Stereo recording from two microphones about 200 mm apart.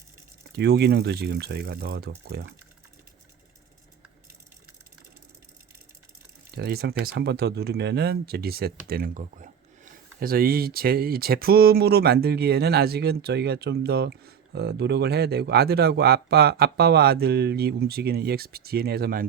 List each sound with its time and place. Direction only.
0.5 s speech: 55° right (ahead or behind)
6.5 s speech: 50° right (ahead or behind)